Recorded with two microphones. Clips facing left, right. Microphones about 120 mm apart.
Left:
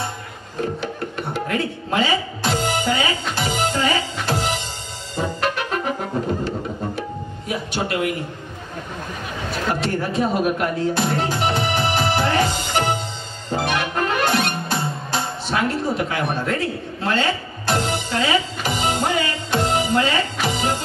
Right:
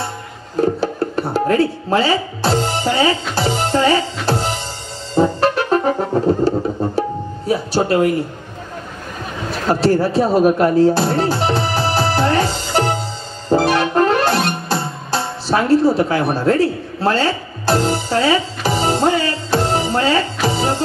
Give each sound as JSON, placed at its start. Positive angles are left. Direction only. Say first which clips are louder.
{"t": 0.6, "sound": "music", "louder": "right 8 dB", "side_deg": -35}
{"t": 5.1, "sound": "brass instrument", "louder": "right 8 dB", "side_deg": -35}
{"t": 7.0, "sound": "tabla", "louder": "right 8 dB", "side_deg": -35}
{"t": 9.7, "sound": "speech", "louder": "right 9 dB", "side_deg": -35}
{"t": 13.5, "sound": "music", "louder": "right 8 dB", "side_deg": -35}